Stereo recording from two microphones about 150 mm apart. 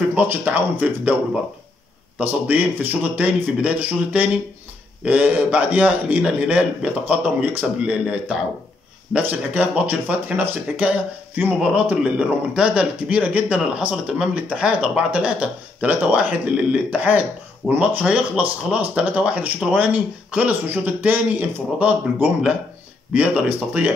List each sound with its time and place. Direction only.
0.1 s speech: 10° right (ahead or behind)